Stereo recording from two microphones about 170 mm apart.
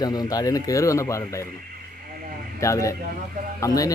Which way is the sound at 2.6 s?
20° left (ahead or behind).